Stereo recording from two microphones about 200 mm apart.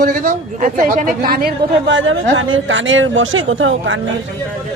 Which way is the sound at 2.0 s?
75° right (ahead or behind).